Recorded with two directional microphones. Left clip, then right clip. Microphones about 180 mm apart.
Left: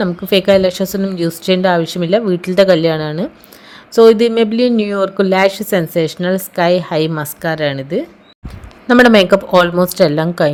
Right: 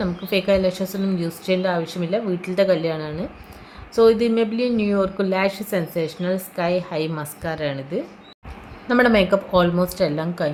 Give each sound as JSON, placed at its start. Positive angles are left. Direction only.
{"t": 0.0, "sound": "a woman's voice", "side_deg": 45}
{"t": 8.9, "sound": "a woman's voice", "side_deg": 55}